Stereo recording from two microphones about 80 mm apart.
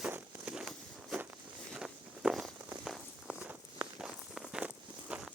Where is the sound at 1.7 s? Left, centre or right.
Centre.